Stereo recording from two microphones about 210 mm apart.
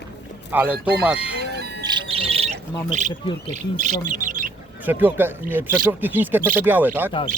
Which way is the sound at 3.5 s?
35° right (ahead or behind).